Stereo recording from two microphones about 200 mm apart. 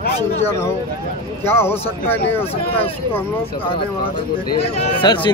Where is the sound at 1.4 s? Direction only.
10° left (ahead or behind).